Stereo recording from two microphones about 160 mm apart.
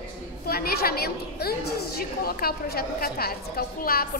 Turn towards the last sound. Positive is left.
turn(degrees=70)  # may be behind; listen again after turning